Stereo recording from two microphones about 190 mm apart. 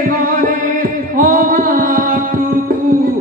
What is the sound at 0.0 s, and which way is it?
Music, 50° right (ahead or behind).